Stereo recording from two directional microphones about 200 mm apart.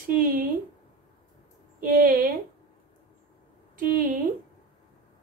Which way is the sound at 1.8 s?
45° right (ahead or behind).